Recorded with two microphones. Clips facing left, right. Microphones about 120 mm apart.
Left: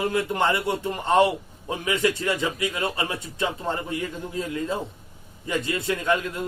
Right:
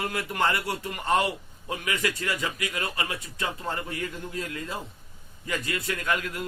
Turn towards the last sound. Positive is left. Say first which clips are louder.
# left 5 dB
turn(degrees=25)  # may be behind; listen again after turning